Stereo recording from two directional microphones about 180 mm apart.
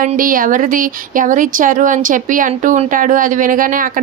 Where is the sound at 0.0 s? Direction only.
50° right (ahead or behind).